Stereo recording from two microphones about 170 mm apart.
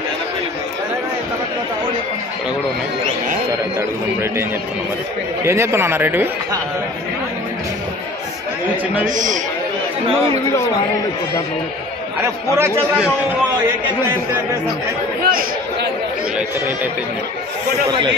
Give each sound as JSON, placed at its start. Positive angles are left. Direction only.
{"t": 5.4, "sound": "speech", "side_deg": -15}
{"t": 9.0, "sound": "a man's voice", "side_deg": -50}
{"t": 12.5, "sound": "speech", "side_deg": -15}
{"t": 15.2, "sound": "chatter", "side_deg": -60}